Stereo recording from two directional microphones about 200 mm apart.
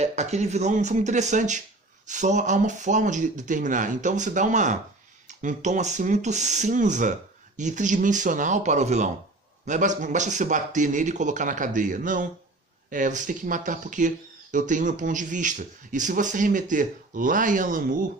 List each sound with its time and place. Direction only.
0.0 s speech: 35° right (ahead or behind)